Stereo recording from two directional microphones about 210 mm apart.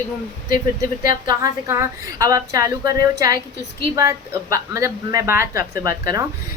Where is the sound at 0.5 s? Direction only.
40° left (ahead or behind).